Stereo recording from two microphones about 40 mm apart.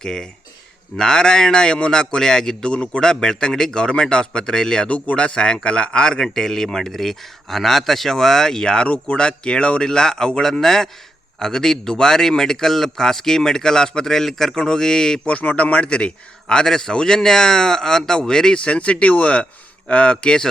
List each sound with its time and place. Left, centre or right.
0.0 s speech: centre
4.9 s speech: left; by 15.3 s centre
15.3 s speech: left; by 18.6 s centre
18.6 s speech: left